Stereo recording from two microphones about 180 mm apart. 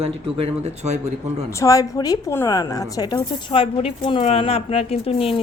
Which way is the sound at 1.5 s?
15° left (ahead or behind).